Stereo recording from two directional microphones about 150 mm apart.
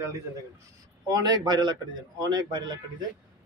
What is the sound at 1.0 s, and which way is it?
A man's voice, 25° right (ahead or behind).